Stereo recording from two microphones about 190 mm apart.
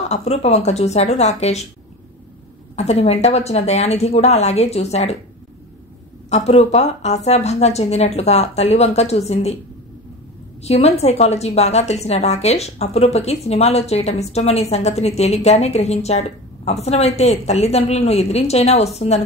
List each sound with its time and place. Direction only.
0.1 s a woman's voice: 35° left (ahead or behind)
2.7 s a woman's voice: 35° left (ahead or behind)
6.3 s a woman's voice: 35° left (ahead or behind)
10.6 s a woman's voice: 35° left (ahead or behind)